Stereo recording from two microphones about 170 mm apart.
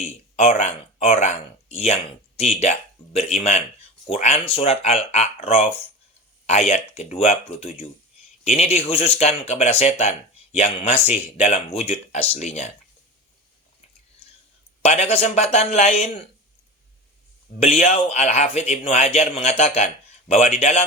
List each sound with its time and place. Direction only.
0.0 s speech: 40° left (ahead or behind)
14.8 s speech: 35° left (ahead or behind)
17.6 s speech: 40° left (ahead or behind)